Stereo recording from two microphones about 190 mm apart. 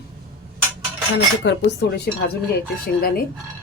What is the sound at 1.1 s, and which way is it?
Cutlery, 65° left (ahead or behind).